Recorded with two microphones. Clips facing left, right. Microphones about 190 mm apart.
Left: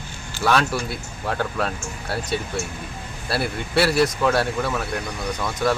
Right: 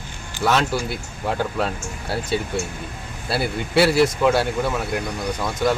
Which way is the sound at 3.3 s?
Centre (ahead or behind).